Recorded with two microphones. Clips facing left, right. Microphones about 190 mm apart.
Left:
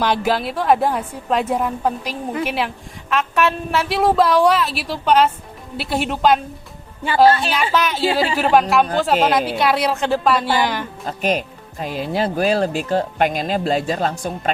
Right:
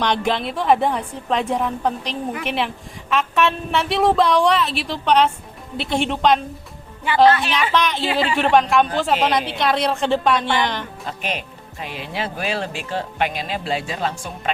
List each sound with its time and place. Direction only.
0.0 s a woman's voice: 5° left (ahead or behind)
7.3 s speech: 30° left (ahead or behind)
7.7 s a woman's voice: 5° left (ahead or behind)
8.0 s speech: 30° left (ahead or behind)
8.4 s a woman's voice: 5° left (ahead or behind)
11.0 s speech: 40° left (ahead or behind)